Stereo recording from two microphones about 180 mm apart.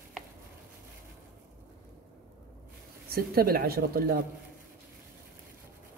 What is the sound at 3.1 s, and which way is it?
Speech, 55° right (ahead or behind).